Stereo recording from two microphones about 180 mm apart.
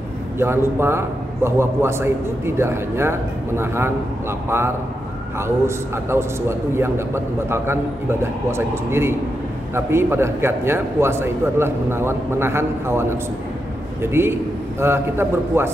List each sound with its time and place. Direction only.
0.4 s a man's voice: 15° right (ahead or behind)
6.1 s a man's voice: 10° right (ahead or behind)
14.0 s a man's voice: 15° right (ahead or behind)